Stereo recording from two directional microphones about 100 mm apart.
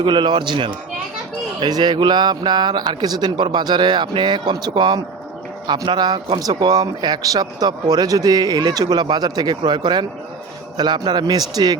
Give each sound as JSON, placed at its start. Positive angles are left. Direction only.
{"t": 0.0, "sound": "speech", "side_deg": -50}